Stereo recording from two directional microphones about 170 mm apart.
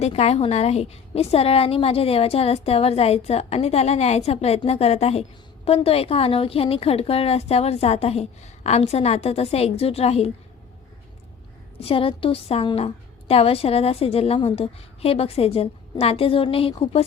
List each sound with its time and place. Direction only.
0.0 s a woman's voice: 40° left (ahead or behind)
11.8 s a woman's voice: 35° left (ahead or behind)